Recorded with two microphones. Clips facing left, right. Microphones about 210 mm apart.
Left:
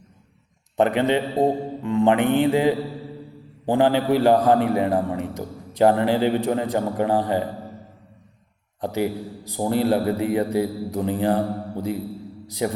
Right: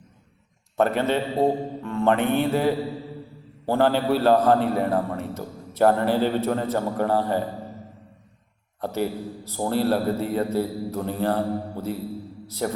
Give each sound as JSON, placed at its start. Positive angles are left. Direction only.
{"t": 0.8, "sound": "a man's voice", "side_deg": 15}
{"t": 8.8, "sound": "a man's voice", "side_deg": 15}